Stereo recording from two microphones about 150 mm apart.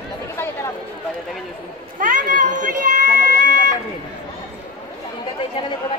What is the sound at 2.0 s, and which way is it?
Speech, 60° right (ahead or behind).